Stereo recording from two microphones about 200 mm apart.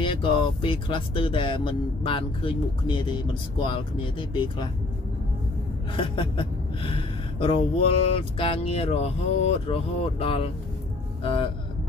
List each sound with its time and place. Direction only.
0.0 s speech: 25° left (ahead or behind)
5.9 s speech: 25° left (ahead or behind)